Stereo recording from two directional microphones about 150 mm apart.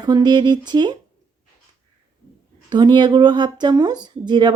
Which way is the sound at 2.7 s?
30° right (ahead or behind).